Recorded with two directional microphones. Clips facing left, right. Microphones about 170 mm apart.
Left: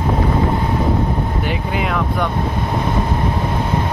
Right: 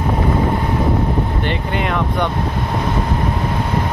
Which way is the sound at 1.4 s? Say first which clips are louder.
Even; 5° left (ahead or behind).